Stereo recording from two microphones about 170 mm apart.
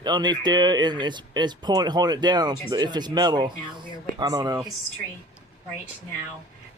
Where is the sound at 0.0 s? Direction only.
25° right (ahead or behind).